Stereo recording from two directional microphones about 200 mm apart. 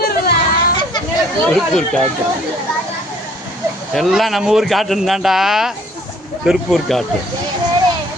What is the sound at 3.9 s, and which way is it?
A man's voice, centre (ahead or behind).